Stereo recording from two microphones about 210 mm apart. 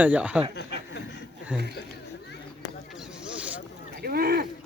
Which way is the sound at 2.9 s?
5° right (ahead or behind).